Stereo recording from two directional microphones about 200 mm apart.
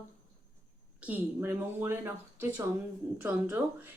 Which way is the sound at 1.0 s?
10° right (ahead or behind).